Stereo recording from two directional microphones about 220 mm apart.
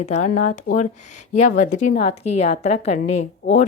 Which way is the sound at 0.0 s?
30° left (ahead or behind).